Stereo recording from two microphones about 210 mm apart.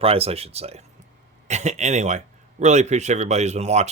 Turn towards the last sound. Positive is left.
turn(degrees=-30)  # may be behind; listen again after turning